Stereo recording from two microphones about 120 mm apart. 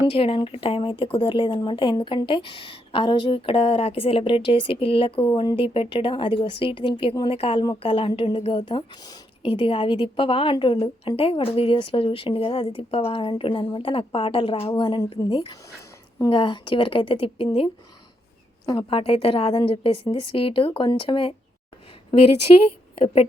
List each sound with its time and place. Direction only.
0.1 s speech: 50° left (ahead or behind)
18.6 s speech: 35° left (ahead or behind)
18.9 s a woman's voice: 50° left (ahead or behind)